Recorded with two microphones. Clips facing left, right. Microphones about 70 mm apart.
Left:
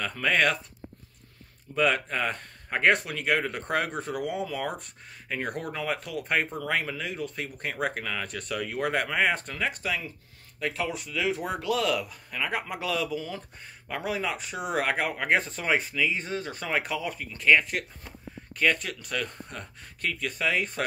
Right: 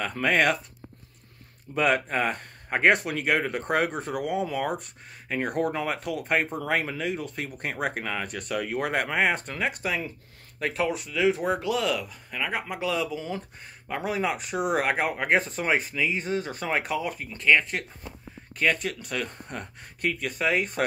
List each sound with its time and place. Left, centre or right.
0.0 s speech: centre
1.8 s speech: centre
18.6 s speech: centre